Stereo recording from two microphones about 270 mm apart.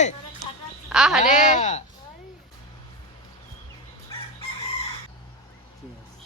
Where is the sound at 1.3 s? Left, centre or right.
Left.